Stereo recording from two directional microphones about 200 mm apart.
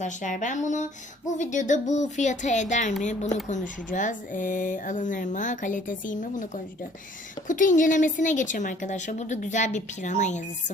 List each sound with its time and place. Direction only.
0.0 s speech: 40° left (ahead or behind)
7.4 s speech: 40° left (ahead or behind)